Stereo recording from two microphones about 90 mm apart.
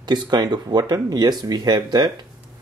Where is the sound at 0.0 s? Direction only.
50° right (ahead or behind).